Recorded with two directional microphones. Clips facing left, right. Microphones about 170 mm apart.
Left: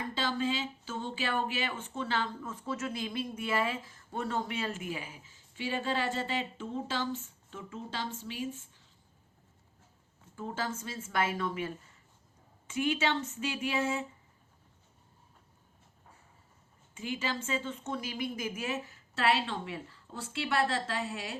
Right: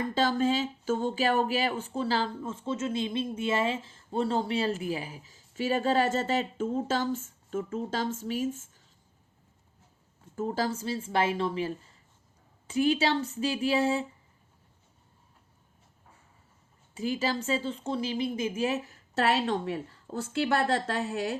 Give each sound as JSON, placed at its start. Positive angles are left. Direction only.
{"t": 0.1, "sound": "speech", "side_deg": -45}
{"t": 10.3, "sound": "speech", "side_deg": -40}
{"t": 16.9, "sound": "speech", "side_deg": -35}